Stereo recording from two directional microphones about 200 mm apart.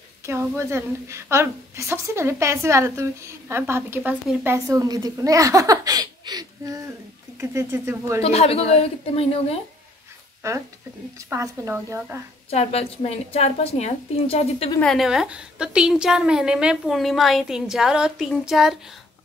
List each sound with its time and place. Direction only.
0.3 s a woman's voice: 15° right (ahead or behind)
8.2 s speech: 30° left (ahead or behind)
10.4 s a woman's voice: 15° right (ahead or behind)
12.4 s a woman's voice: 30° left (ahead or behind)
14.8 s a woman's voice: centre (ahead or behind)